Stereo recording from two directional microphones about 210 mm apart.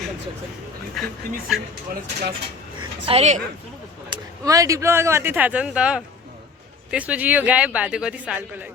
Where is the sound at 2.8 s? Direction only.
25° right (ahead or behind).